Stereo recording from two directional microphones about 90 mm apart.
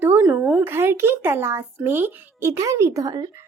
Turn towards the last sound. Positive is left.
turn(degrees=-45)  # may be behind; listen again after turning